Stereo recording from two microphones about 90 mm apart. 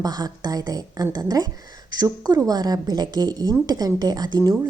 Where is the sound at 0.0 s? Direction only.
45° right (ahead or behind).